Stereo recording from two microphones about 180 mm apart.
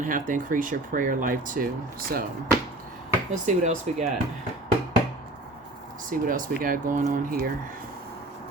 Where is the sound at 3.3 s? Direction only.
45° right (ahead or behind).